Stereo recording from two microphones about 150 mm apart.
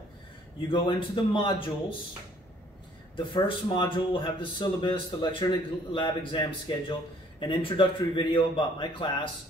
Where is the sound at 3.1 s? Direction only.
35° left (ahead or behind).